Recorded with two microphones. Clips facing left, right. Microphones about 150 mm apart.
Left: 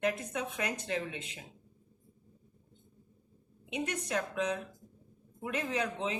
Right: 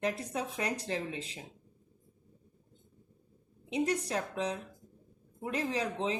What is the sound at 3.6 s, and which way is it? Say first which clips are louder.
A woman's voice: right 5 dB; 35° right (ahead or behind).